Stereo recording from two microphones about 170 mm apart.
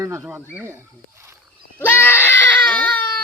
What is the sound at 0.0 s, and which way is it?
Speech, 20° right (ahead or behind).